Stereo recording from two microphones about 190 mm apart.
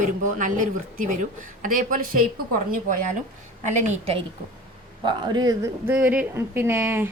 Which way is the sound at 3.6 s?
40° right (ahead or behind).